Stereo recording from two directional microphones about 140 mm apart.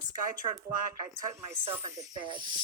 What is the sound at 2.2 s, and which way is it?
Speech, 35° right (ahead or behind).